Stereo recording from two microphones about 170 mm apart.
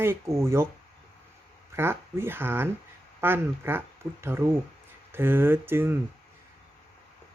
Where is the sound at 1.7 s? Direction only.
15° right (ahead or behind).